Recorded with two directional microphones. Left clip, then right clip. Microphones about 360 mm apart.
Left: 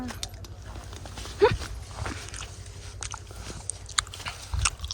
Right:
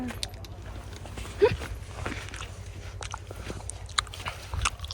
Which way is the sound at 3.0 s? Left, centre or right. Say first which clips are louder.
Right 1 dB; centre.